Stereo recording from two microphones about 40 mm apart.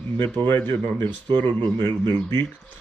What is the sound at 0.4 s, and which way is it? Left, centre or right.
Speech, left.